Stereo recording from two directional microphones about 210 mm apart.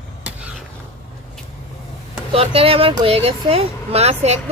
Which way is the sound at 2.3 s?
25° right (ahead or behind).